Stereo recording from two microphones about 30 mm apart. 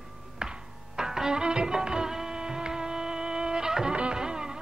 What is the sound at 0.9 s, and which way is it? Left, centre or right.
Music, centre.